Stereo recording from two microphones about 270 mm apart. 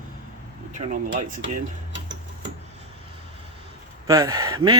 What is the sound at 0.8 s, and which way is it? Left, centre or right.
Speech, right.